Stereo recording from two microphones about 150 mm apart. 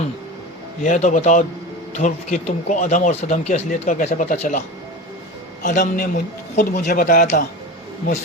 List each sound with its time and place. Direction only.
0.8 s speech: 55° left (ahead or behind)
5.6 s speech: 55° left (ahead or behind)